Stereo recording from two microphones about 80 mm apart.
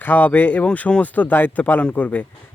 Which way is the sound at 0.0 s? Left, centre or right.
Left.